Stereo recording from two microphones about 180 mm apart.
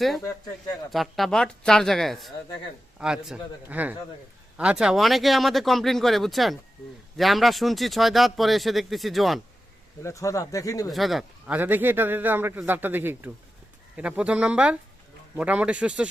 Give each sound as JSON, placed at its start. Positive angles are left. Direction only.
{"t": 0.9, "sound": "speech", "side_deg": 0}
{"t": 10.0, "sound": "speech", "side_deg": 15}
{"t": 10.8, "sound": "a man's voice", "side_deg": 0}